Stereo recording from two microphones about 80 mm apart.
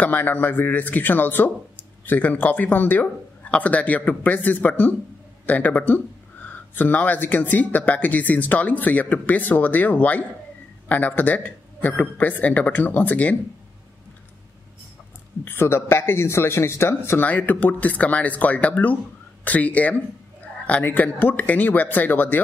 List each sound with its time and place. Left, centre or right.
0.0 s speech: left
15.4 s speech: left